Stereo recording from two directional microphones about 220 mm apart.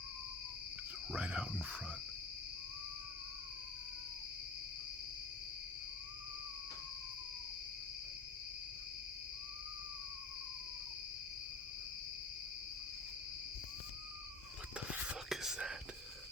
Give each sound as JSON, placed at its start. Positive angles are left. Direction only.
{"t": 1.1, "sound": "speech", "side_deg": -5}
{"t": 14.8, "sound": "whispering", "side_deg": -5}